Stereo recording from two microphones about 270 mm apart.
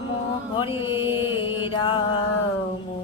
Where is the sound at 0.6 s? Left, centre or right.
Centre.